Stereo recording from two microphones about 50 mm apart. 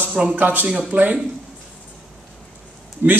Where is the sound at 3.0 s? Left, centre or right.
Right.